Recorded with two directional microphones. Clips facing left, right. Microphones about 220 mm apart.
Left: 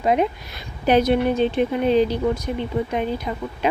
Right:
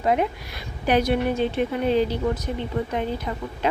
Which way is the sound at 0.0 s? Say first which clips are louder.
Left 2 dB; 20° left (ahead or behind).